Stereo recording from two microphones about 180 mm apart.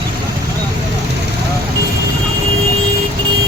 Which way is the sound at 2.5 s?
35° right (ahead or behind).